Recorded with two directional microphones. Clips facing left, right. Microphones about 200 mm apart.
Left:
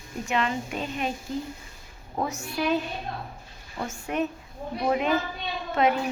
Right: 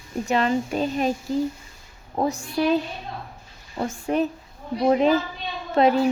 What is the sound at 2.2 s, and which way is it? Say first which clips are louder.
Speech: right 6 dB; 35° right (ahead or behind).